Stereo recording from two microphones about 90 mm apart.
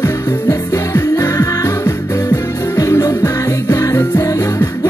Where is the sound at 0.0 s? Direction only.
40° left (ahead or behind).